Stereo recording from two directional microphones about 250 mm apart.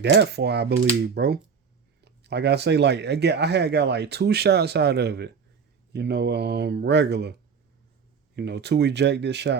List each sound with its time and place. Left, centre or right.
0.0 s speech: right
8.4 s speech: right